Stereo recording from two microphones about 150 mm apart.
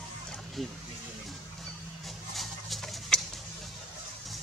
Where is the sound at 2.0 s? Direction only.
Centre (ahead or behind).